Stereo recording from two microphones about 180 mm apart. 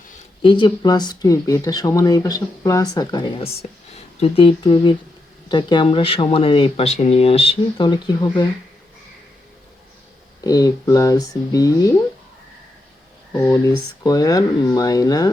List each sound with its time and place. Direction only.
0.4 s speech: 25° left (ahead or behind)
10.4 s speech: 20° left (ahead or behind)
14.0 s speech: 20° left (ahead or behind)